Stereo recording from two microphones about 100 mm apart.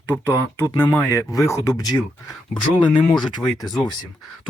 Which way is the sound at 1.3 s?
30° left (ahead or behind).